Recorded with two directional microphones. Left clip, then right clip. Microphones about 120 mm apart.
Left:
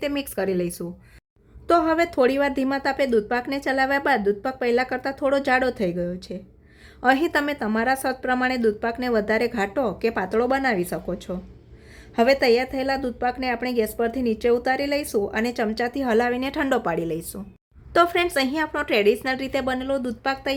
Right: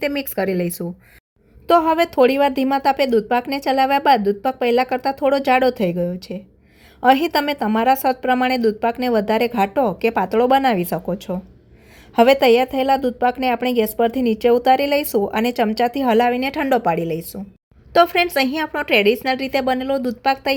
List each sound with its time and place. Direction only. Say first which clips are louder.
0.0 s a woman's voice: right 4 dB; 30° right (ahead or behind)